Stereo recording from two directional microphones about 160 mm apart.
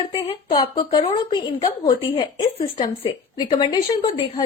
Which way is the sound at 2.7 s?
30° left (ahead or behind).